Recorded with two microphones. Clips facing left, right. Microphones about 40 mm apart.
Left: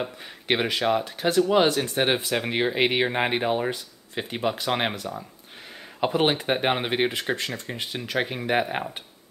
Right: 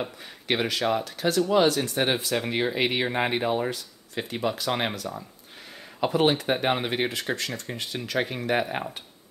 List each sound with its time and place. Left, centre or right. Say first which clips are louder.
0.5 s speech: left 2 dB; left